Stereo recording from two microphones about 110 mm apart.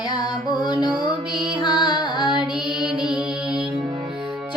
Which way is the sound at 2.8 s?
5° right (ahead or behind).